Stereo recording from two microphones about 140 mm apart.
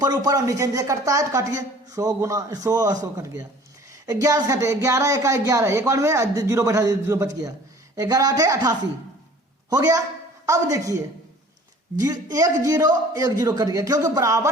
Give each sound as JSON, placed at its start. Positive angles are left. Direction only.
{"t": 0.0, "sound": "a man's voice", "side_deg": -25}